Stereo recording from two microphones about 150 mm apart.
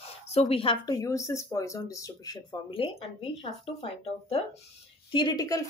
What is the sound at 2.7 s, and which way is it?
Speech, 40° left (ahead or behind).